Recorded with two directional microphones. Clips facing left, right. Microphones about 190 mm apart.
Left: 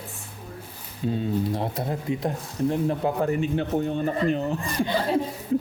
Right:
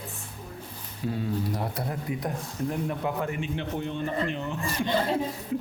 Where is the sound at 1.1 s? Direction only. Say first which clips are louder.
Left 4 dB; 25° left (ahead or behind).